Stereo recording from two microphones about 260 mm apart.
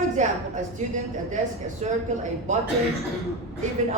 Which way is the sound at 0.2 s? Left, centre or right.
Right.